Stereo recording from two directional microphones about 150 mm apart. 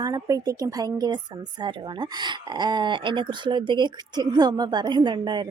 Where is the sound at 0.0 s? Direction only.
25° right (ahead or behind).